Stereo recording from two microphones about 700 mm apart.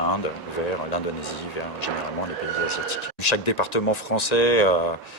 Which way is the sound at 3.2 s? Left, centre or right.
Left.